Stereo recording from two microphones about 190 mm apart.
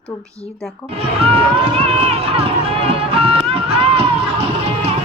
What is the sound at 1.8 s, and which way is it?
Run, 30° right (ahead or behind).